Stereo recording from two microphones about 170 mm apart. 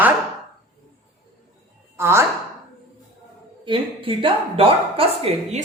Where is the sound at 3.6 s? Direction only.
30° right (ahead or behind).